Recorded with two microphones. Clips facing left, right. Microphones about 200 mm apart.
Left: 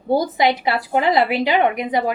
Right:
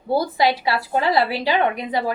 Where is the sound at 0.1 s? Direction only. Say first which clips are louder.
Left 2 dB; 20° left (ahead or behind).